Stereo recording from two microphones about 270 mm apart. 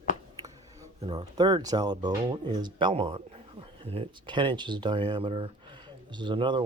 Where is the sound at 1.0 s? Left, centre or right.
Centre.